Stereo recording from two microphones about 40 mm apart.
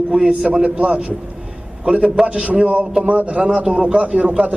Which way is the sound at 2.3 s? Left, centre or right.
Right.